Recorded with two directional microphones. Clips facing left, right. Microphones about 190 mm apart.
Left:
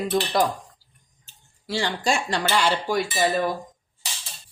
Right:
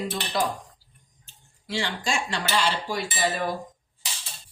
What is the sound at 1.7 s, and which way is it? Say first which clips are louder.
Speech: left 4 dB; 40° left (ahead or behind).